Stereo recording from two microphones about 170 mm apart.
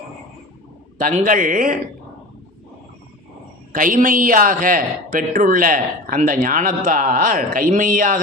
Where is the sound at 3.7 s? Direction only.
50° right (ahead or behind).